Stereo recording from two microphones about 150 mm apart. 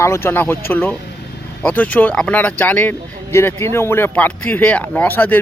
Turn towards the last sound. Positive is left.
turn(degrees=15)  # may be behind; listen again after turning